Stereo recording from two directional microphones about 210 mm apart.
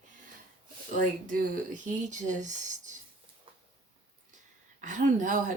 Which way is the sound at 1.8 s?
35° right (ahead or behind).